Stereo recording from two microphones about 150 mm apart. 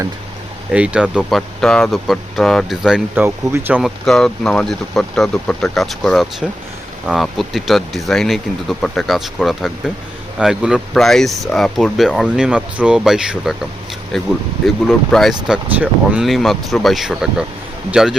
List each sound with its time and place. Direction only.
0.7 s speech: 10° right (ahead or behind)
1.4 s speech: 5° left (ahead or behind)
3.2 s speech: 15° right (ahead or behind)
3.8 s speech: centre (ahead or behind)